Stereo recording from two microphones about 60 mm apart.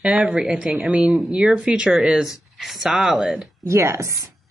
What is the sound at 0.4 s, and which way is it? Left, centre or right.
Speech, centre.